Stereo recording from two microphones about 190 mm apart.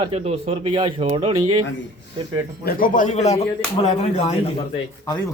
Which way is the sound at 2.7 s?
45° left (ahead or behind).